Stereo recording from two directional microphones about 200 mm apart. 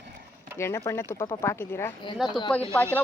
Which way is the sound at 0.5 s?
15° left (ahead or behind).